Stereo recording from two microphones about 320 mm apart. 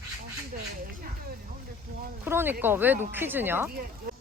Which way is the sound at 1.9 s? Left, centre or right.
Right.